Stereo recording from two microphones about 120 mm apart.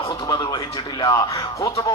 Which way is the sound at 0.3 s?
35° left (ahead or behind).